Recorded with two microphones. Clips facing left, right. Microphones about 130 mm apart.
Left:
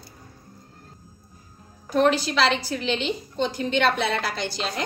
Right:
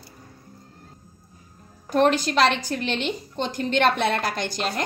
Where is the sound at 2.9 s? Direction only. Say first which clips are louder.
Left 1 dB; 50° right (ahead or behind).